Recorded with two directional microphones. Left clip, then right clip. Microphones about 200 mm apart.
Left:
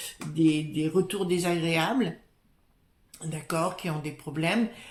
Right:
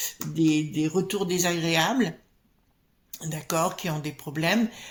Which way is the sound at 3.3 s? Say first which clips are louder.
Right 3 dB; 35° right (ahead or behind).